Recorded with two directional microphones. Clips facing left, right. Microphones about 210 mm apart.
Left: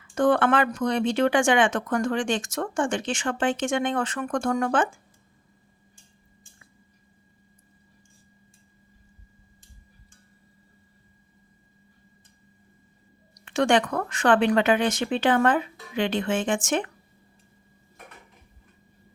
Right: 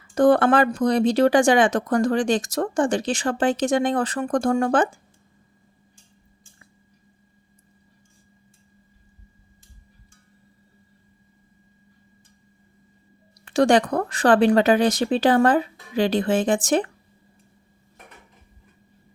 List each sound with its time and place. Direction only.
0.1 s speech: 35° right (ahead or behind)
13.4 s speech: 35° right (ahead or behind)